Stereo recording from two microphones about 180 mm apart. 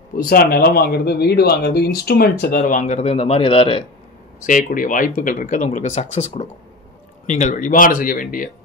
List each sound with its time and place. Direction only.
0.2 s speech: 55° left (ahead or behind); by 3.8 s 30° left (ahead or behind)
4.5 s speech: 50° left (ahead or behind)